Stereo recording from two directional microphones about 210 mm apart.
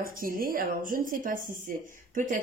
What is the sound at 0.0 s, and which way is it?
Speech, 45° right (ahead or behind).